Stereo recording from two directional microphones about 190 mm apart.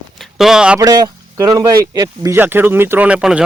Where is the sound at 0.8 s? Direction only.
20° right (ahead or behind).